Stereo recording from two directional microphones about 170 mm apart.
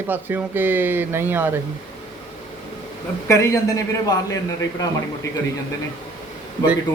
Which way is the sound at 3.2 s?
15° left (ahead or behind).